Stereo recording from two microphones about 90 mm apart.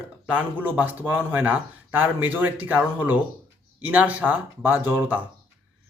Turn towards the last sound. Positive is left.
turn(degrees=-20)  # may be behind; listen again after turning